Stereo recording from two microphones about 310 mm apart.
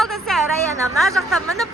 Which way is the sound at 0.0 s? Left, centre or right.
Centre.